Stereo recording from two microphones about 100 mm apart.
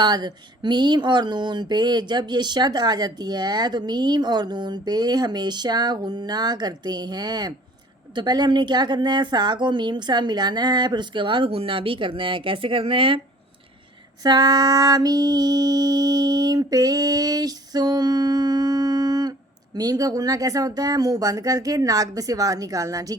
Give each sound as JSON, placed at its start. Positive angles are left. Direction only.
{"t": 0.0, "sound": "speech", "side_deg": -45}
{"t": 14.3, "sound": "female singing", "side_deg": -40}